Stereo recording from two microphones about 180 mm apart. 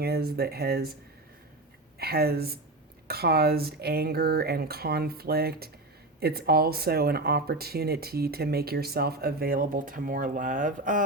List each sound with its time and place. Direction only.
0.0 s speech: 60° right (ahead or behind)
2.0 s speech: 60° right (ahead or behind)